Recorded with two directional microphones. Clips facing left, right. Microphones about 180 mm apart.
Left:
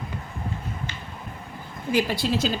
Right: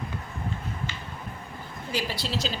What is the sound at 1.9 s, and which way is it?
Speech, 50° left (ahead or behind).